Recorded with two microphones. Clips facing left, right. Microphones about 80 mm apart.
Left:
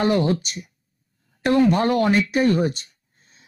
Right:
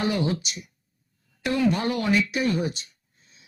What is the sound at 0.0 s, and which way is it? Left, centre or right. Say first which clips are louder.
Speech: left 6 dB; left.